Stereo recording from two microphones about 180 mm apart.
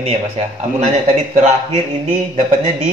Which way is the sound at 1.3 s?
40° right (ahead or behind).